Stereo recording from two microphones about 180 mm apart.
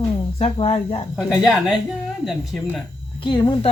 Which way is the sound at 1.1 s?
Centre (ahead or behind).